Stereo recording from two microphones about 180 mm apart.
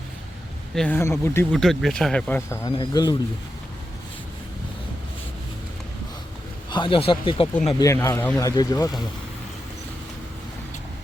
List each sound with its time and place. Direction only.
0.8 s speech: 10° left (ahead or behind)
1.5 s speech: centre (ahead or behind)
2.6 s speech: 25° left (ahead or behind)
6.7 s speech: 25° left (ahead or behind)
7.8 s speech: 15° left (ahead or behind)